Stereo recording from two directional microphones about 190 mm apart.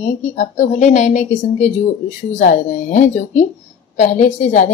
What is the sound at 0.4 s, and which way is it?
A woman's voice, 40° left (ahead or behind).